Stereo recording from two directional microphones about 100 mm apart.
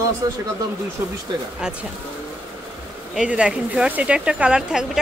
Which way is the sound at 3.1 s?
10° right (ahead or behind).